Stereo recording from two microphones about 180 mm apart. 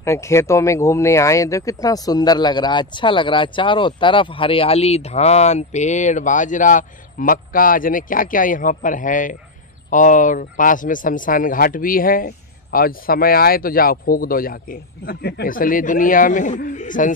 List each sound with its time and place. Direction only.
0.0 s speech: 15° left (ahead or behind); by 17.1 s 45° left (ahead or behind)